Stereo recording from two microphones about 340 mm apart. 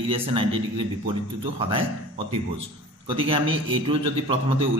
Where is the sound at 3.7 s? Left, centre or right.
Centre.